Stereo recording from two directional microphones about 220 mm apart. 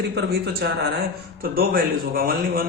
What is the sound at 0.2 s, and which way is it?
A man's voice, 45° right (ahead or behind).